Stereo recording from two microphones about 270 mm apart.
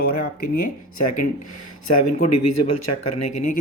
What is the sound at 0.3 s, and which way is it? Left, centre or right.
Speech, left.